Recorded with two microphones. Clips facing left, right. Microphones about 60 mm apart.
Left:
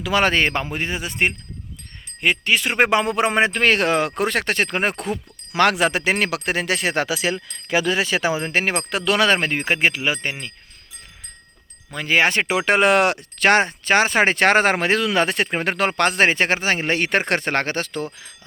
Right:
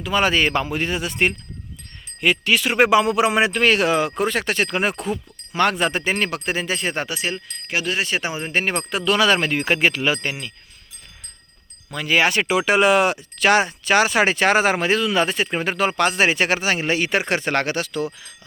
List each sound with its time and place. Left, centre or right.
0.0 s speech: left
5.5 s speech: left
9.3 s speech: left
11.9 s speech: left